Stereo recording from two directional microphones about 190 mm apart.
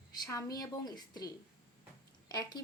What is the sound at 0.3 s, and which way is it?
A woman's voice, 15° left (ahead or behind).